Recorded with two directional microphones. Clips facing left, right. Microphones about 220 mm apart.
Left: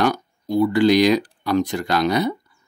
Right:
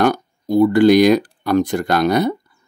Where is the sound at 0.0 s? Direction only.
50° right (ahead or behind).